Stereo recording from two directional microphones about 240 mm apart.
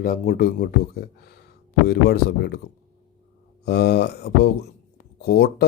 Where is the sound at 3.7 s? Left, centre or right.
Left.